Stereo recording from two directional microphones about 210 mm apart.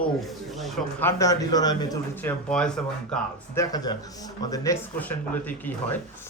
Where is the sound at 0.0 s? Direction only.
Centre (ahead or behind).